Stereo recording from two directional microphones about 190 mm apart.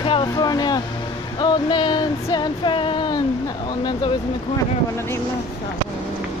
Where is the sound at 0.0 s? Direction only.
25° left (ahead or behind).